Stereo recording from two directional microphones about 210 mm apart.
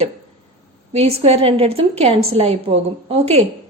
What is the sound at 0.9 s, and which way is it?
A woman's voice, 30° right (ahead or behind).